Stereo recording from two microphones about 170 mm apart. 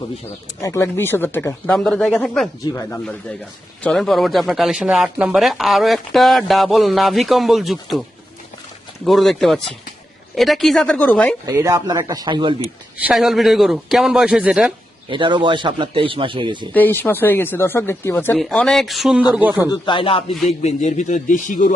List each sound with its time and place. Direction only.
0.6 s speech: 15° left (ahead or behind); by 8.0 s centre (ahead or behind)
9.0 s speech: centre (ahead or behind)
11.4 s speech: 15° right (ahead or behind)
13.1 s speech: centre (ahead or behind)
15.1 s speech: 30° right (ahead or behind)
16.7 s speech: 10° left (ahead or behind); by 19.7 s 10° right (ahead or behind)
19.7 s a man's voice: 25° left (ahead or behind); by 21.7 s 50° left (ahead or behind)